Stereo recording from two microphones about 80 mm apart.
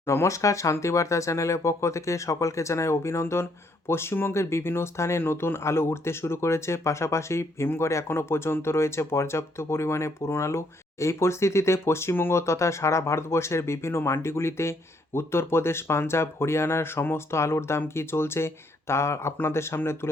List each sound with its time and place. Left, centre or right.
0.0 s speech: left